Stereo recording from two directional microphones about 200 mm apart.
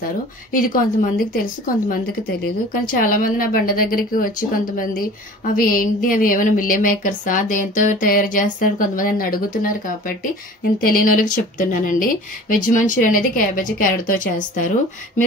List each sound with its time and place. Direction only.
0.5 s a woman's voice: 45° left (ahead or behind)